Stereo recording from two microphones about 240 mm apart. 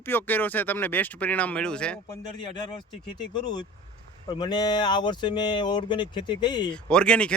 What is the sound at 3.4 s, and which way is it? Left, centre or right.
Speech, centre.